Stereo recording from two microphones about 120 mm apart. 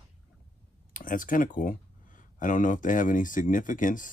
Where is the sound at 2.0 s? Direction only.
90° left.